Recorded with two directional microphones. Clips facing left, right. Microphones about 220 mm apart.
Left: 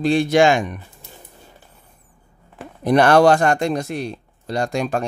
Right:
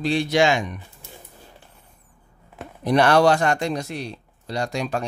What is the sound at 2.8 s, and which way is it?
Speech, 50° left (ahead or behind).